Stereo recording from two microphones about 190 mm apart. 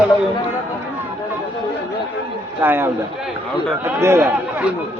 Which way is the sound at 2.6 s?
10° right (ahead or behind).